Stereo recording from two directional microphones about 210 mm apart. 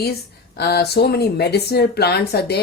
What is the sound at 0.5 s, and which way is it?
A woman's voice, 50° left (ahead or behind).